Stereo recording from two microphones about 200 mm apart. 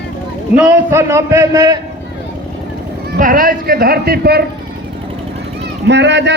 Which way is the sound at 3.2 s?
45° right (ahead or behind).